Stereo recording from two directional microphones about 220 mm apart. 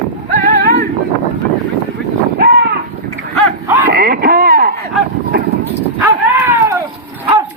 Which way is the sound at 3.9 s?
40° right (ahead or behind).